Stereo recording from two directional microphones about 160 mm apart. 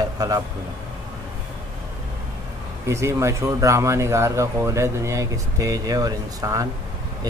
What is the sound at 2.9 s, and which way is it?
Speech, 20° right (ahead or behind).